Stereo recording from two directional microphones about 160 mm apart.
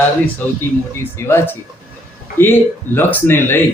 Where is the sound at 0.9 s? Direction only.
15° left (ahead or behind).